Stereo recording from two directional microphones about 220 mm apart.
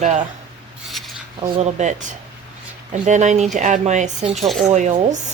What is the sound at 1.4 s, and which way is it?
Speech, 30° right (ahead or behind).